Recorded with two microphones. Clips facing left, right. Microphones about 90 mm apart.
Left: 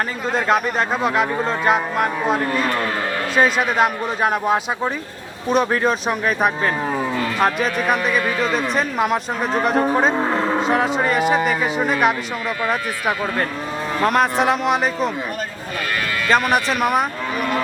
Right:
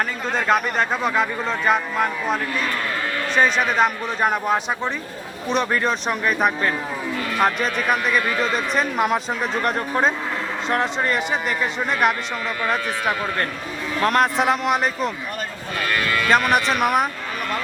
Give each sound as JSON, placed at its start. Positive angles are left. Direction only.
{"t": 0.3, "sound": "a man's voice", "side_deg": 0}
{"t": 10.2, "sound": "vehicle", "side_deg": 55}
{"t": 10.7, "sound": "a man's voice", "side_deg": 5}
{"t": 16.3, "sound": "a man's voice", "side_deg": 0}